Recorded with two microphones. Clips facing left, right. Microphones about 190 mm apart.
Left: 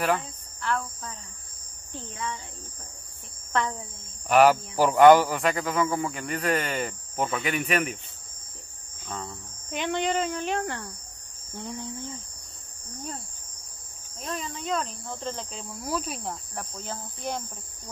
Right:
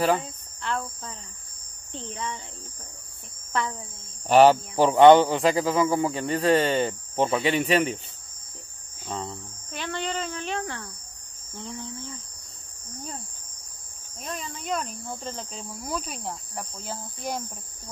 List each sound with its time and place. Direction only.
0.0 s cricket: 25° right (ahead or behind)
1.9 s speech: 25° right (ahead or behind)
4.3 s speech: 30° right (ahead or behind)
9.0 s cricket: 25° right (ahead or behind)
9.7 s speech: 15° left (ahead or behind)
14.2 s cricket: 5° right (ahead or behind)